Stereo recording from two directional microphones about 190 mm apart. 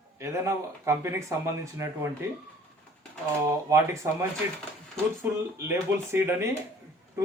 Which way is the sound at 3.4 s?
15° right (ahead or behind).